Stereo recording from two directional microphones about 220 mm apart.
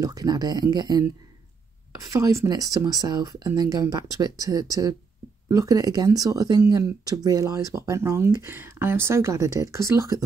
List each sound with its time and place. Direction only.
0.0 s speech: 15° right (ahead or behind)
2.1 s speech: 15° right (ahead or behind)